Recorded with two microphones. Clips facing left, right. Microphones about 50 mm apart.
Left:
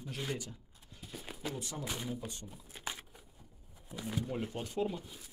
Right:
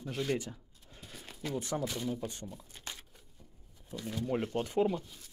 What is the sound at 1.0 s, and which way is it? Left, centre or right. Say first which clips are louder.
Horse: even; centre.